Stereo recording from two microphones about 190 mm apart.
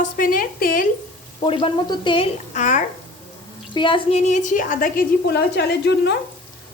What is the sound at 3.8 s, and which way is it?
A woman's voice, 25° left (ahead or behind).